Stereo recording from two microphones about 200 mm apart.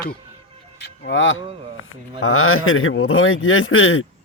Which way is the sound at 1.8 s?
85° left.